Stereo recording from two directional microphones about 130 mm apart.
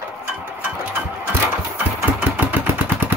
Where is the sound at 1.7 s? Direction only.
10° right (ahead or behind).